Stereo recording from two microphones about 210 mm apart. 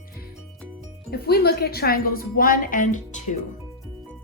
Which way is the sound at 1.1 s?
50° left (ahead or behind).